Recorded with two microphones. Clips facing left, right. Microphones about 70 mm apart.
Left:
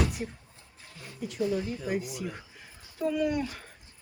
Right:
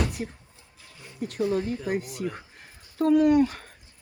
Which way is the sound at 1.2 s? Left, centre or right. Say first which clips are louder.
Right 4 dB; right.